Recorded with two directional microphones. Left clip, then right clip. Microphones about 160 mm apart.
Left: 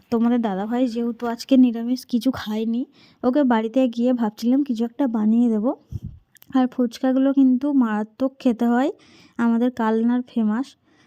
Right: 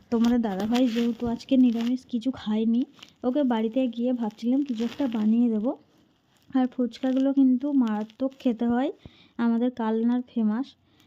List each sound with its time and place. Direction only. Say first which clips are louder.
0.1 s a woman's voice: left 4 dB; 25° left (ahead or behind)
1.2 s speech: left 6 dB; 45° left (ahead or behind); by 10.7 s 30° left (ahead or behind)